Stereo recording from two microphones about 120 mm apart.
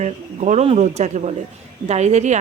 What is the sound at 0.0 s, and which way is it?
Speech, 75° right (ahead or behind).